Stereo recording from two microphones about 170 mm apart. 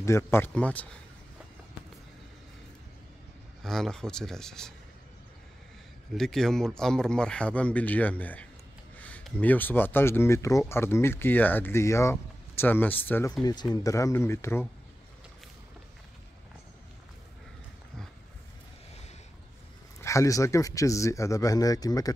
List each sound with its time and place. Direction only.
0.0 s speech: 15° left (ahead or behind)
3.6 s speech: centre (ahead or behind)
6.1 s speech: 5° left (ahead or behind)
13.4 s speech: 25° left (ahead or behind)
20.0 s speech: 15° left (ahead or behind)